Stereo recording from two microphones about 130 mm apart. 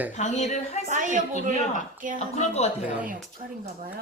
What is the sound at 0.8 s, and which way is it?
Speech, 75° right (ahead or behind).